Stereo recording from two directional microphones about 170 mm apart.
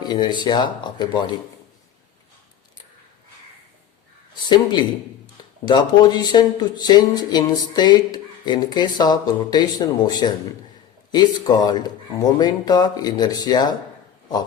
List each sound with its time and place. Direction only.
0.0 s speech: 25° left (ahead or behind)
4.4 s speech: 25° left (ahead or behind)